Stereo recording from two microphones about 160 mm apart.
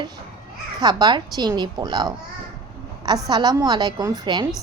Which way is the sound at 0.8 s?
25° right (ahead or behind).